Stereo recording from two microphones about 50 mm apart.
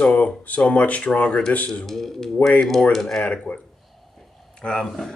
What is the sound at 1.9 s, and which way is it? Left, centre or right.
Speech, centre.